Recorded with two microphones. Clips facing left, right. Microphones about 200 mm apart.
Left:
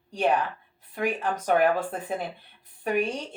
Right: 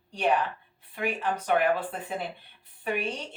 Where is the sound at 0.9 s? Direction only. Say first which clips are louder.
Left 2 dB; 45° left (ahead or behind).